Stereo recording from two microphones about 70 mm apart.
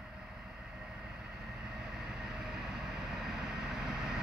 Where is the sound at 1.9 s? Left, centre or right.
Centre.